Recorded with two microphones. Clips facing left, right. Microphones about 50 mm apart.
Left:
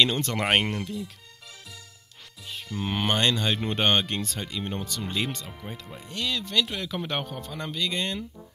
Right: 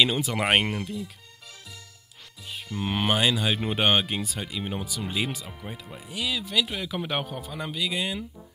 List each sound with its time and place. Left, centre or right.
0.0 s speech: centre
2.4 s speech: centre